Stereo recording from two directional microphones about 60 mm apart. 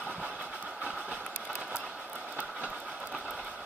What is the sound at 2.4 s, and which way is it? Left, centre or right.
Train, right.